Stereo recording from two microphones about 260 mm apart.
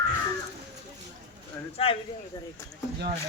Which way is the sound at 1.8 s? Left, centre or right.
Left.